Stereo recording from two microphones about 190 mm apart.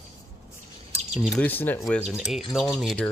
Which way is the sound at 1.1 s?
Centre (ahead or behind).